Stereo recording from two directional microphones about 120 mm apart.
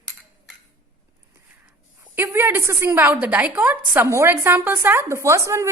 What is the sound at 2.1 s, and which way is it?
A woman's voice, 20° right (ahead or behind).